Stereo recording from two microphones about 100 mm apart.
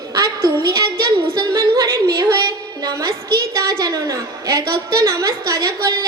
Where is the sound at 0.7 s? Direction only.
40° right (ahead or behind).